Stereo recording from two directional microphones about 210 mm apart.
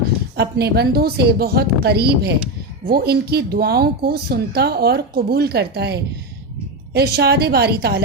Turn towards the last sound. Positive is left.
turn(degrees=-50)  # may be behind; listen again after turning